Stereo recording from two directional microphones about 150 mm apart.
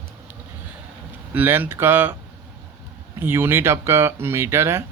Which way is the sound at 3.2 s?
15° right (ahead or behind).